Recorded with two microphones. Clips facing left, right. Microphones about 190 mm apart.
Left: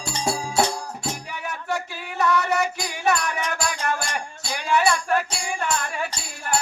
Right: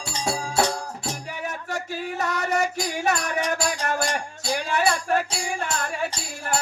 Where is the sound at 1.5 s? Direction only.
45° right (ahead or behind).